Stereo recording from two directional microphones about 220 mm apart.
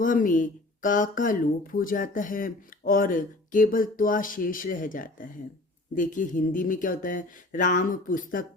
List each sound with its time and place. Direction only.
0.0 s speech: 35° left (ahead or behind)